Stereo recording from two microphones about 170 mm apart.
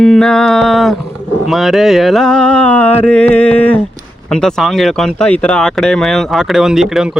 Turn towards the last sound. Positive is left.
turn(degrees=0)  # may be behind; listen again after turning